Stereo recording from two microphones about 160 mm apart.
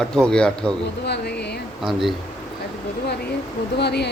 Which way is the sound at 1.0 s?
90° left.